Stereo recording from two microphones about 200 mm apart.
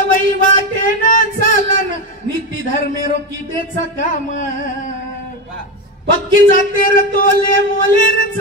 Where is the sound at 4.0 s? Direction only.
40° left (ahead or behind).